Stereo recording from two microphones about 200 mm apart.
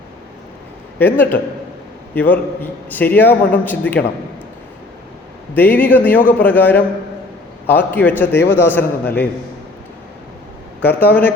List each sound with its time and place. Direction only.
0.9 s a man's voice: 10° left (ahead or behind)
5.5 s a man's voice: 10° left (ahead or behind)
10.8 s a man's voice: 10° left (ahead or behind)